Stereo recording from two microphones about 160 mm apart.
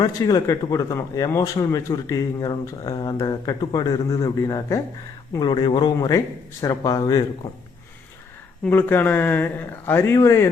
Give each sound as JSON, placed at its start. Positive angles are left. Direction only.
{"t": 0.0, "sound": "speech", "side_deg": 25}
{"t": 8.6, "sound": "speech", "side_deg": 15}